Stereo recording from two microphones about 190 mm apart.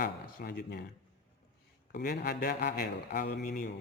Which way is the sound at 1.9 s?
55° left (ahead or behind).